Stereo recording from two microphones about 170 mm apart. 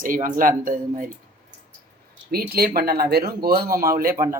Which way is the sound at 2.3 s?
65° right (ahead or behind).